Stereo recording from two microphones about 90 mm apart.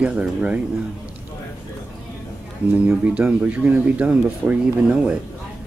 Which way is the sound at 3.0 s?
15° right (ahead or behind).